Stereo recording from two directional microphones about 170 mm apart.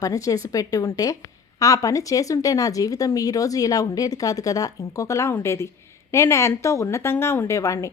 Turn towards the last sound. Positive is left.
turn(degrees=20)  # may be behind; listen again after turning